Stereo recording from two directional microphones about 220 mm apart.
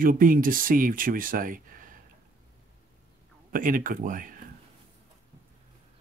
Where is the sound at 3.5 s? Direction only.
40° right (ahead or behind).